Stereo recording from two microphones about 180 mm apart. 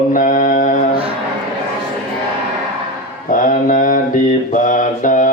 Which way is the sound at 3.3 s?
50° left (ahead or behind).